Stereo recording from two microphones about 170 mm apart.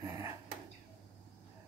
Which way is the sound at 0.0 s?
15° right (ahead or behind).